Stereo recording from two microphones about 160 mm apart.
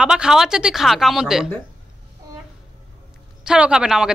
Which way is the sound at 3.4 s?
5° right (ahead or behind).